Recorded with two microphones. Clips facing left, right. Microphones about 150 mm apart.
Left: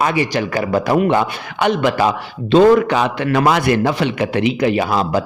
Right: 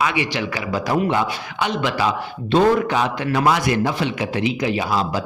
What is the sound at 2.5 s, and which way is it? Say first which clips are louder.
A man's voice: left 6 dB; 80° left.